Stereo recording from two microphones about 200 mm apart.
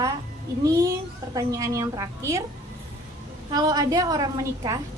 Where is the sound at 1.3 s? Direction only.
15° right (ahead or behind).